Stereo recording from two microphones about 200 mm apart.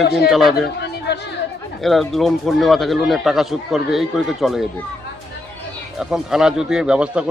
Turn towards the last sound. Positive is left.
turn(degrees=-5)  # may be behind; listen again after turning